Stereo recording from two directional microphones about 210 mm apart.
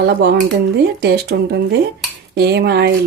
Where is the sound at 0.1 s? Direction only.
50° right (ahead or behind).